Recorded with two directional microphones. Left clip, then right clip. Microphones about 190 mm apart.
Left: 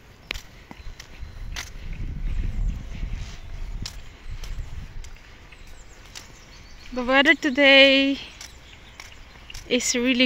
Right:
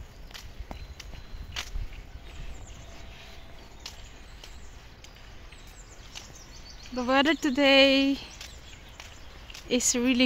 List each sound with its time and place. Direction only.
1.6 s a sound: 65° left (ahead or behind)
3.8 s vehicle: 70° left (ahead or behind)
7.0 s speech: 5° left (ahead or behind)
9.7 s speech: 5° left (ahead or behind)